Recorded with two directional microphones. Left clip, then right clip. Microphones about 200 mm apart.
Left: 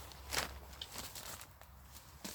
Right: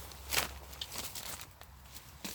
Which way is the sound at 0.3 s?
40° right (ahead or behind).